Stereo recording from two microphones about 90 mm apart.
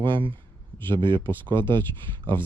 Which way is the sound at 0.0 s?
65° right (ahead or behind).